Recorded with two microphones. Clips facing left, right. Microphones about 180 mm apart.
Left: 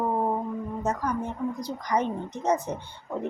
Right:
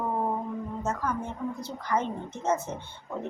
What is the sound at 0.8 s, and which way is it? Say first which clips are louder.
Speech: left 3 dB; 15° left (ahead or behind).